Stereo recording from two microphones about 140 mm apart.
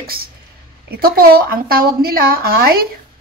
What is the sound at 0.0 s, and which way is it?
A woman's voice, 90° right.